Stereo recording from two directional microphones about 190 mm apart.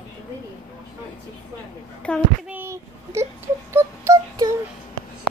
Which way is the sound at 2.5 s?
15° right (ahead or behind).